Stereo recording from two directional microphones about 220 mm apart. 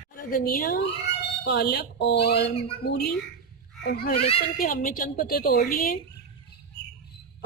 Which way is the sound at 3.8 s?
45° left (ahead or behind).